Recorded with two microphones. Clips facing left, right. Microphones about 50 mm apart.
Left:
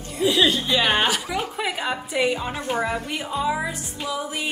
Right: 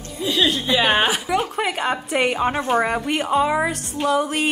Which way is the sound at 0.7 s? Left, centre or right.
Centre.